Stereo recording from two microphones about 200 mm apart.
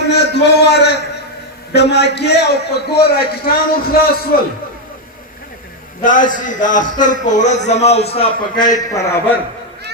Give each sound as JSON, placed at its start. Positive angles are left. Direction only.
{"t": 0.1, "sound": "a man's voice", "side_deg": 55}
{"t": 6.0, "sound": "a man's voice", "side_deg": 40}